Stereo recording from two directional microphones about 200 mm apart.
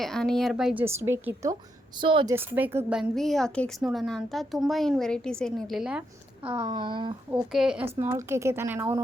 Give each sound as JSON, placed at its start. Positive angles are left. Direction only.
{"t": 0.0, "sound": "speech", "side_deg": 5}
{"t": 2.0, "sound": "speech", "side_deg": -25}
{"t": 2.3, "sound": "a woman's voice", "side_deg": -10}
{"t": 6.7, "sound": "speech", "side_deg": -25}
{"t": 7.5, "sound": "a woman's voice", "side_deg": -5}
{"t": 8.0, "sound": "speech", "side_deg": -15}